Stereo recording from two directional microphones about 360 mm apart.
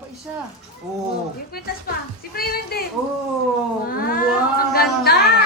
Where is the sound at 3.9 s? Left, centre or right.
Left.